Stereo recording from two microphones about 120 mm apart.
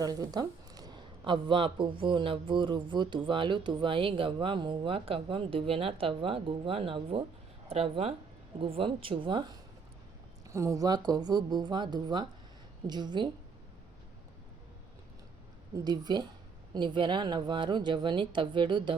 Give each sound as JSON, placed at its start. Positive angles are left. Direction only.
{"t": 0.0, "sound": "speech", "side_deg": -30}
{"t": 10.5, "sound": "a woman's voice", "side_deg": -25}
{"t": 15.7, "sound": "a woman's voice", "side_deg": -35}